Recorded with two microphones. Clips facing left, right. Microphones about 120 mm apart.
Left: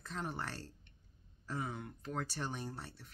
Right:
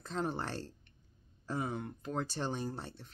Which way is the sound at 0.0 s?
30° right (ahead or behind).